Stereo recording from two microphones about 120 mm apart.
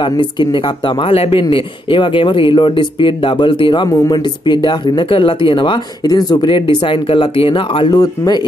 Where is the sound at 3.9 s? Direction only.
30° left (ahead or behind).